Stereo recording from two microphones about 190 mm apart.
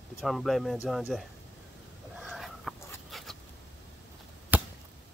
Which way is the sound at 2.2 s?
Centre (ahead or behind).